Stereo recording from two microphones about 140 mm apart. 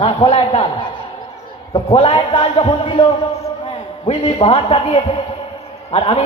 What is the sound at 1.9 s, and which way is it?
A man's voice, 35° left (ahead or behind).